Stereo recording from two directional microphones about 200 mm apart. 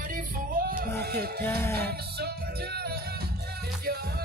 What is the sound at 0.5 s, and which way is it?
Music, 45° right (ahead or behind).